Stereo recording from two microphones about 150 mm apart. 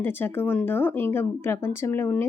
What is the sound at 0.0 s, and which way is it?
Speech, 15° left (ahead or behind).